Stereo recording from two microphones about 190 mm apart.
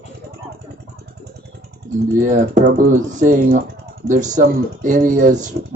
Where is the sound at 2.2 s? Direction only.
45° right (ahead or behind).